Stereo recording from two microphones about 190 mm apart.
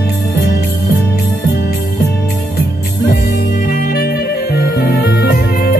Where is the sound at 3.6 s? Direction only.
50° left (ahead or behind).